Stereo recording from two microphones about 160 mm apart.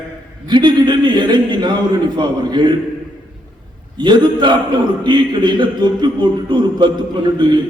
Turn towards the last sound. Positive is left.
turn(degrees=-30)  # may be behind; listen again after turning